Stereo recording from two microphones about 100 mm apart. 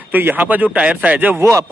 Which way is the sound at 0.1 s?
20° right (ahead or behind).